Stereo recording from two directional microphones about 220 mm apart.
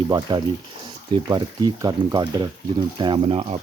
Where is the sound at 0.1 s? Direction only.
20° right (ahead or behind).